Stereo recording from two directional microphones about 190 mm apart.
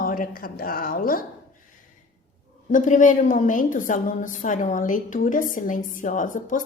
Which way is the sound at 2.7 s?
40° left (ahead or behind).